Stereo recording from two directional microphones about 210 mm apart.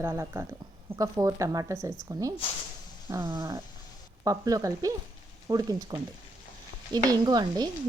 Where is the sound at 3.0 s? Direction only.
15° right (ahead or behind).